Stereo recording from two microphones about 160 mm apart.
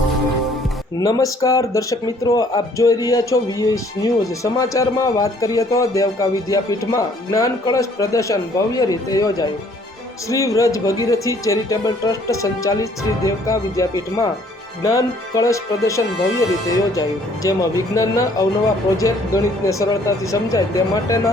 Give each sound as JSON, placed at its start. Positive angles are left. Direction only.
{"t": 0.9, "sound": "speech", "side_deg": 20}